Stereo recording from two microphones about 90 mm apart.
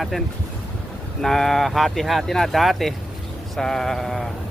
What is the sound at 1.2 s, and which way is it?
Speech, 5° left (ahead or behind).